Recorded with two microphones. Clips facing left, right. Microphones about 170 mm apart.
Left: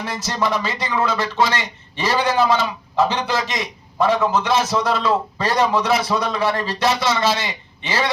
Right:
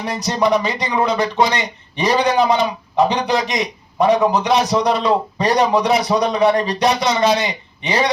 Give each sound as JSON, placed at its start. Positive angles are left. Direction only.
{"t": 0.0, "sound": "speech", "side_deg": -20}